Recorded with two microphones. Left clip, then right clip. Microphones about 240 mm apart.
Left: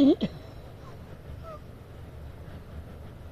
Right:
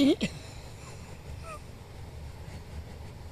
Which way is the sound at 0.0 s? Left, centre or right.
Centre.